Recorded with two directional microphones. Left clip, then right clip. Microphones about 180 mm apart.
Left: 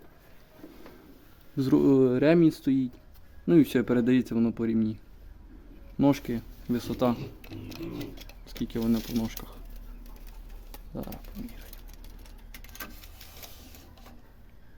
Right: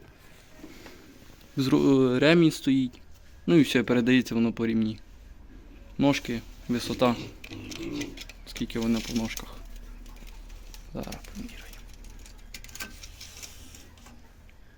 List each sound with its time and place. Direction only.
1.5 s speech: 10° left (ahead or behind)
6.0 s speech: 15° left (ahead or behind)
7.5 s a sound: 35° left (ahead or behind)
8.2 s speech: 15° left (ahead or behind)